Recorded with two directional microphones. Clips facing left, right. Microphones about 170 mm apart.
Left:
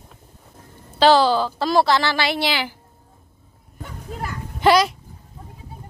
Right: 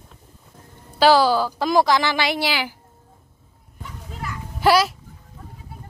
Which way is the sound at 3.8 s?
50° left (ahead or behind).